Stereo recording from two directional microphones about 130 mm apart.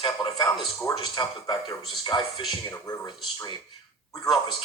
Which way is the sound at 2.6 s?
25° left (ahead or behind).